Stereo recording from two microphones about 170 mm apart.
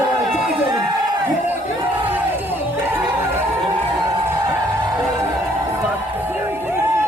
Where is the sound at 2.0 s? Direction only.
10° right (ahead or behind).